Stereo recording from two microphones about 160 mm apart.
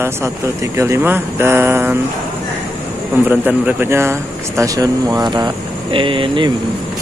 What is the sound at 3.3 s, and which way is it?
Speech, 10° right (ahead or behind).